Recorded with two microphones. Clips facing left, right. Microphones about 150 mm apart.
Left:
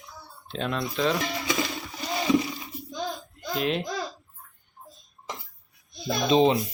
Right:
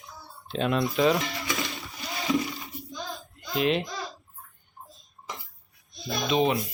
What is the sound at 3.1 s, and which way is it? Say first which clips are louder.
Baby laughter: left 4 dB; centre (ahead or behind).